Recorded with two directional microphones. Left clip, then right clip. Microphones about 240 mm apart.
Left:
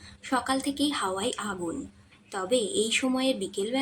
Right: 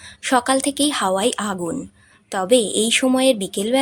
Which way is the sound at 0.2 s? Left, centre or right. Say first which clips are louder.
Right 10 dB; right.